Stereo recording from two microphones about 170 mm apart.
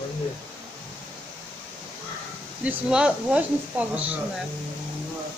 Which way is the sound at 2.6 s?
5° right (ahead or behind).